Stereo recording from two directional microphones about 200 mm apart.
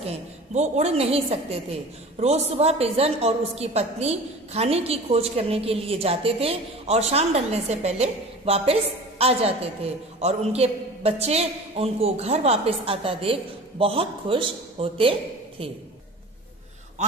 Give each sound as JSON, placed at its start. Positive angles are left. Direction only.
{"t": 0.0, "sound": "a woman's voice", "side_deg": -35}